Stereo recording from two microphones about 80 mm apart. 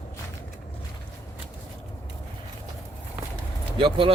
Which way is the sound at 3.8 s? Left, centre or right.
Right.